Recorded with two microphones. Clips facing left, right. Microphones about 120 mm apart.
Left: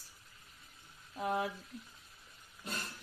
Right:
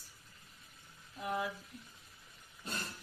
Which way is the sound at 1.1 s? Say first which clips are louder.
Left 3 dB; 30° left (ahead or behind).